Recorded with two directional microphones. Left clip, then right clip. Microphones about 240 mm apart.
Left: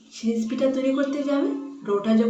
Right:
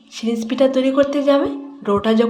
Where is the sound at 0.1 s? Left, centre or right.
Right.